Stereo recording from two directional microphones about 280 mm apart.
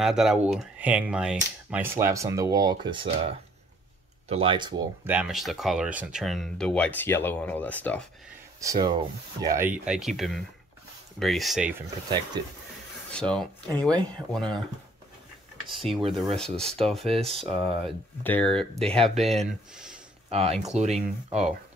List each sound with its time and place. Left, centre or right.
0.0 s speech: centre
8.5 s speech: centre
12.4 s speech: centre
13.1 s speech: centre
15.7 s speech: centre
17.1 s speech: centre
17.4 s speech: centre
20.2 s speech: right